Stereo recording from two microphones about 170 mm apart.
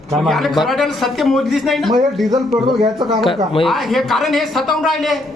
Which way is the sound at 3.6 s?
Centre (ahead or behind).